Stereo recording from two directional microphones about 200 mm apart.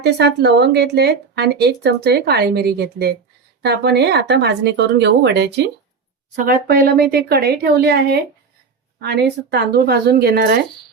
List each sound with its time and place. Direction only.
0.0 s speech: 55° right (ahead or behind)
6.3 s a woman's voice: 45° right (ahead or behind)